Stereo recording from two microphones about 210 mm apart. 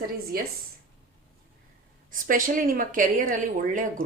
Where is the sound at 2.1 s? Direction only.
40° right (ahead or behind).